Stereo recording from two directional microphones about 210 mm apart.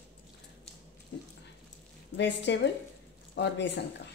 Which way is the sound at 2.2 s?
55° left (ahead or behind).